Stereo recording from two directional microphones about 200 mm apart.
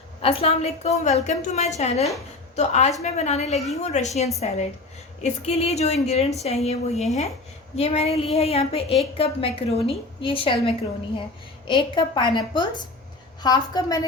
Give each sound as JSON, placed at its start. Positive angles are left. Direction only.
{"t": 0.2, "sound": "a woman's voice", "side_deg": 30}